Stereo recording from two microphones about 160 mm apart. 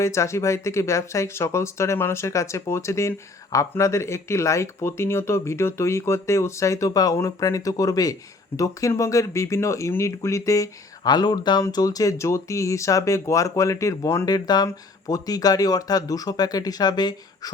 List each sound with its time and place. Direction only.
0.0 s speech: 20° left (ahead or behind)